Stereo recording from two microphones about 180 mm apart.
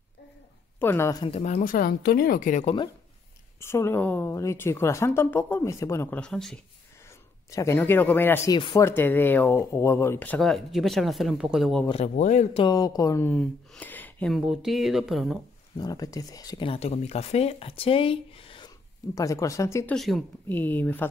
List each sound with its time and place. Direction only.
0.7 s speech: 15° left (ahead or behind)
1.2 s speech: 35° left (ahead or behind)
3.6 s speech: 15° left (ahead or behind)
7.5 s speech: 15° left (ahead or behind)
8.5 s speech: 25° left (ahead or behind)
8.8 s speech: 10° left (ahead or behind)
11.9 s speech: 40° left (ahead or behind)
12.6 s speech: 20° left (ahead or behind); by 15.4 s centre (ahead or behind)
15.8 s speech: 20° left (ahead or behind)
19.1 s speech: 20° left (ahead or behind)
20.0 s speech: centre (ahead or behind)